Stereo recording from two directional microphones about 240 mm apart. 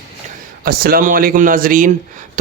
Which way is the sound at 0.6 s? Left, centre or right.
Right.